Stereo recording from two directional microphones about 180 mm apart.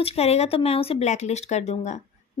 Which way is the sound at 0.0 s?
35° left (ahead or behind).